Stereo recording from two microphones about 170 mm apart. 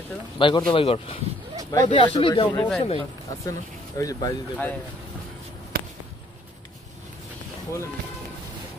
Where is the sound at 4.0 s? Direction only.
20° left (ahead or behind).